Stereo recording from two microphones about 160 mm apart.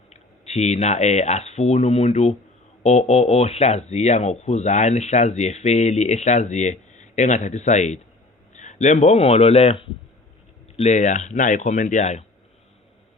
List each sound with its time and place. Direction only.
0.1 s a man's voice: 45° left (ahead or behind)